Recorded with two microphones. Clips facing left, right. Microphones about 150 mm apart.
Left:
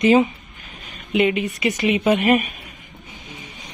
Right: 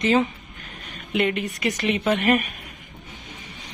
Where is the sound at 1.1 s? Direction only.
5° left (ahead or behind).